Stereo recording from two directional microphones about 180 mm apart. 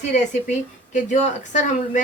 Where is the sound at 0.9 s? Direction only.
45° left (ahead or behind).